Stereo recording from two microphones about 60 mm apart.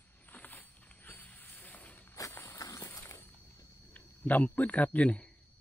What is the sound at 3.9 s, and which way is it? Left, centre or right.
A man's voice, left.